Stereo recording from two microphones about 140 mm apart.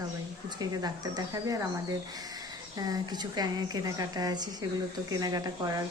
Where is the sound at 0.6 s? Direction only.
30° right (ahead or behind).